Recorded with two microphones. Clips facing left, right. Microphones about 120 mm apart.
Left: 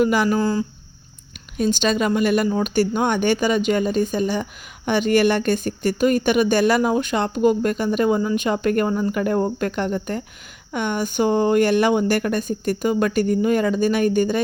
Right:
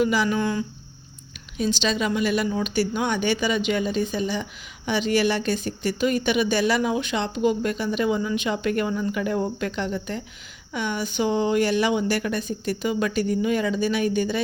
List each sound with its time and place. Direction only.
0.0 s speech: 50° left (ahead or behind)
0.3 s speech: 35° left (ahead or behind)
1.5 s speech: 50° left (ahead or behind)